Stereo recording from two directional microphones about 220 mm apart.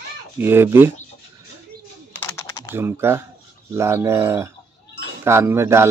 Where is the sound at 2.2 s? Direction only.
10° left (ahead or behind).